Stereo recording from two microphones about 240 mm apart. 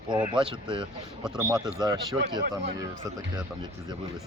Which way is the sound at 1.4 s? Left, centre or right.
Centre.